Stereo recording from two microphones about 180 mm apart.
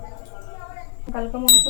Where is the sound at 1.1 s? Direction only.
5° right (ahead or behind).